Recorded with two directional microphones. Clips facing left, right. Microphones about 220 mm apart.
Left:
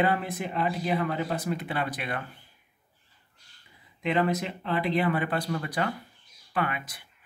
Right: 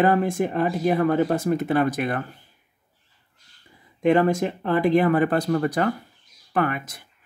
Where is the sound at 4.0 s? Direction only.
45° right (ahead or behind).